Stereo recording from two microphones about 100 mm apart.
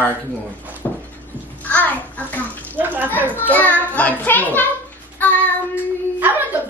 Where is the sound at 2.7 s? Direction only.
20° right (ahead or behind).